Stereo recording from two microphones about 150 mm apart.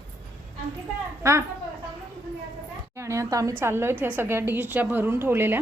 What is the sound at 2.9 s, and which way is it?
A woman's voice, 20° right (ahead or behind).